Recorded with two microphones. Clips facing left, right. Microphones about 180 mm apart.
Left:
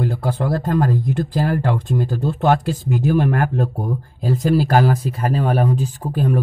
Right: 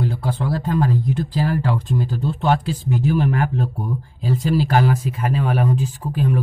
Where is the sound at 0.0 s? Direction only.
45° left (ahead or behind).